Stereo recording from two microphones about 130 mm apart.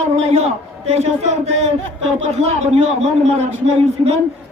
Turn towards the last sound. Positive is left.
turn(degrees=-55)  # may be behind; listen again after turning